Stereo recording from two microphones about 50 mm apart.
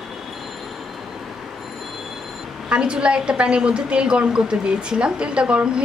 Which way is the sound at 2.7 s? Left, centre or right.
Centre.